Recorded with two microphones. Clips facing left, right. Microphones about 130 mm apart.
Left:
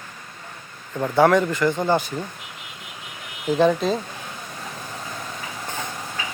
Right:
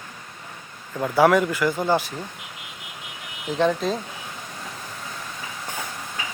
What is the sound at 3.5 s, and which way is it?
Speech, 5° left (ahead or behind).